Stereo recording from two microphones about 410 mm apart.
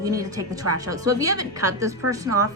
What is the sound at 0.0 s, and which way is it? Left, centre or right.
Speech, centre.